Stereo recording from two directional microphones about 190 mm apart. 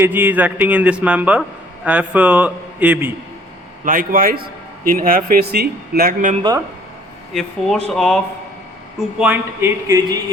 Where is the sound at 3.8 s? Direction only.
45° right (ahead or behind).